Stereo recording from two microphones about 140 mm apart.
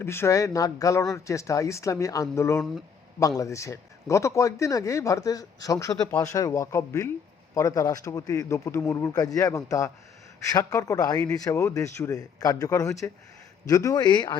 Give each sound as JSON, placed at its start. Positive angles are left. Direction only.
{"t": 0.0, "sound": "a man's voice", "side_deg": 15}